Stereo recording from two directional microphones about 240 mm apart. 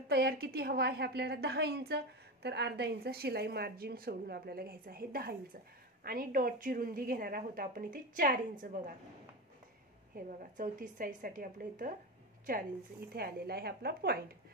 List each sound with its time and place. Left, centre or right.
0.1 s a woman's voice: right
10.1 s a woman's voice: right
13.1 s a woman's voice: right